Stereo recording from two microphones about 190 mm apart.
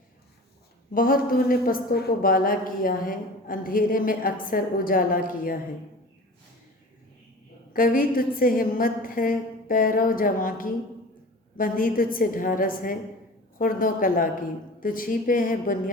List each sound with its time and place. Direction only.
0.9 s a woman's voice: 50° left (ahead or behind)
7.7 s a woman's voice: 50° left (ahead or behind)